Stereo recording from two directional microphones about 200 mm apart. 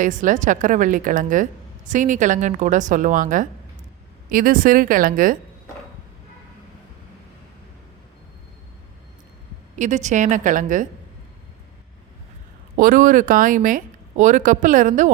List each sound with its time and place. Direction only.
0.0 s a woman's voice: 40° right (ahead or behind)
9.7 s speech: 35° right (ahead or behind)
12.7 s speech: 45° right (ahead or behind)